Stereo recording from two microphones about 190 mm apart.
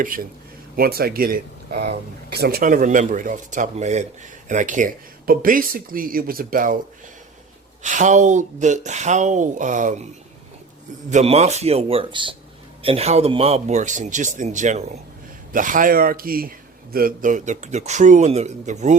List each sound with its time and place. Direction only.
0.0 s speech: 45° right (ahead or behind)
7.8 s speech: 40° right (ahead or behind)
11.1 s speech: 35° right (ahead or behind)